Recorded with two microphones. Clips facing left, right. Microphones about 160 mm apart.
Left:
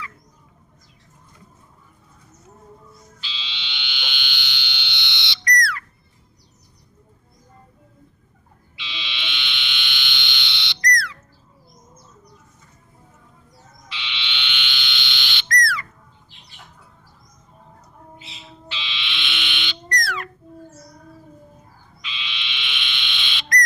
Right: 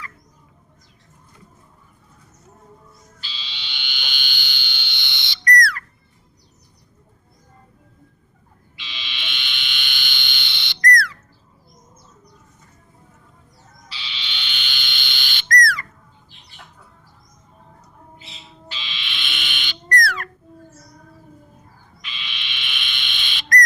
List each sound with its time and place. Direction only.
3.2 s frog: 45° right (ahead or behind)
8.8 s frog: 45° right (ahead or behind)
13.8 s owl: 35° right (ahead or behind)
18.7 s frog: 45° right (ahead or behind)
20.1 s a sound: 45° right (ahead or behind)
22.0 s owl: 45° right (ahead or behind)